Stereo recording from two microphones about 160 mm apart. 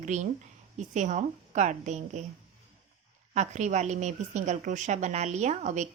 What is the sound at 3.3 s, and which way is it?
A woman's voice, 45° right (ahead or behind).